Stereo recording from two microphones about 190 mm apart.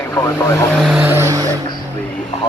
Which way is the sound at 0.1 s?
20° left (ahead or behind).